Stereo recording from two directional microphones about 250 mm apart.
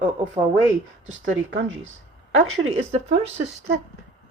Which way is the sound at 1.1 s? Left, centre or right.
Right.